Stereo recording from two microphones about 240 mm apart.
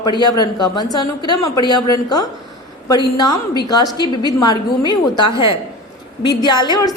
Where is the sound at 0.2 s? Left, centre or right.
Centre.